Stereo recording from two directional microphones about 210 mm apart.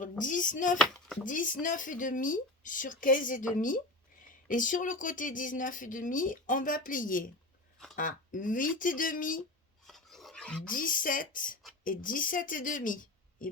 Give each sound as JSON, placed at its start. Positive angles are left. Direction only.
{"t": 0.0, "sound": "a sound", "side_deg": 40}
{"t": 0.8, "sound": "speech", "side_deg": 5}
{"t": 1.2, "sound": "speech", "side_deg": 40}
{"t": 9.8, "sound": "filing", "side_deg": 0}
{"t": 10.7, "sound": "speech", "side_deg": 40}